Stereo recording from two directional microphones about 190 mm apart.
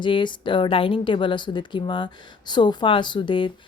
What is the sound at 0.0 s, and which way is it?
A woman's voice, 25° left (ahead or behind).